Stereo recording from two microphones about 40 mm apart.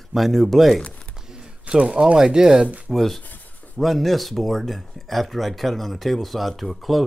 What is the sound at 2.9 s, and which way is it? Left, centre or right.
Speech, centre.